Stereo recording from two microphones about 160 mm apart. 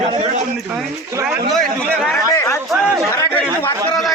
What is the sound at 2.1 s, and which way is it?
Speech, 15° left (ahead or behind).